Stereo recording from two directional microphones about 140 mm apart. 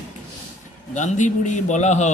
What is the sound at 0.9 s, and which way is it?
Speech, 60° left (ahead or behind).